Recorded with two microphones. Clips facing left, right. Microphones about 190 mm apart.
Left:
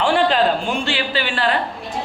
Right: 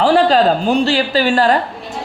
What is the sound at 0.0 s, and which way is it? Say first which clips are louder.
A man's voice: right 5 dB; 40° right (ahead or behind).